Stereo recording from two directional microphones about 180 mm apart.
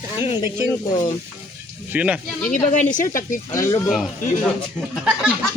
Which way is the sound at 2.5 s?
45° left (ahead or behind).